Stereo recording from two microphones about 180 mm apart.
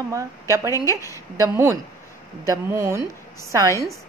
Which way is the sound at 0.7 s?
20° left (ahead or behind).